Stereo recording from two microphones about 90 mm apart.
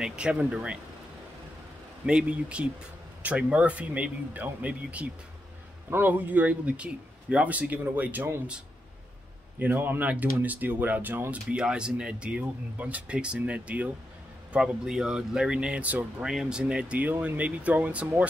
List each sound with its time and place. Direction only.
0.0 s speech: 10° right (ahead or behind)
2.0 s speech: 10° right (ahead or behind)
9.6 s speech: 20° right (ahead or behind)
11.5 s speech: 10° right (ahead or behind)
16.3 s speech: 5° right (ahead or behind)